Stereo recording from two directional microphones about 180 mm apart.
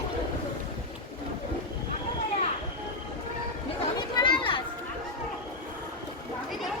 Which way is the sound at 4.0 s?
25° left (ahead or behind).